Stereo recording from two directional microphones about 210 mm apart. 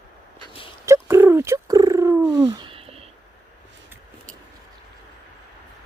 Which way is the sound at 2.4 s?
25° right (ahead or behind).